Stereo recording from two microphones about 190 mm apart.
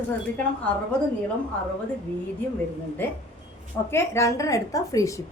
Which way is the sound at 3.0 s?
10° left (ahead or behind).